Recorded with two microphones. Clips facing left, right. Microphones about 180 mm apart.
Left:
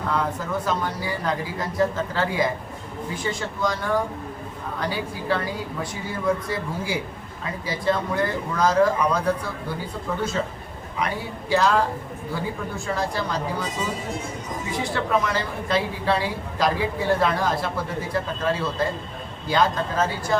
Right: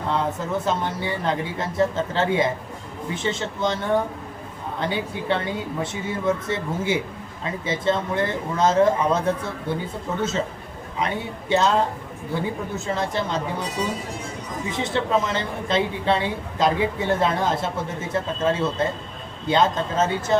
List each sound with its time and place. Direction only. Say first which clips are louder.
0.1 s a woman's voice: right 2 dB; 25° right (ahead or behind)
14.8 s a woman's voice: right 1 dB; 25° right (ahead or behind)